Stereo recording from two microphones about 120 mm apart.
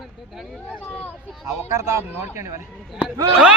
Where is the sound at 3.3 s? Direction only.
10° right (ahead or behind).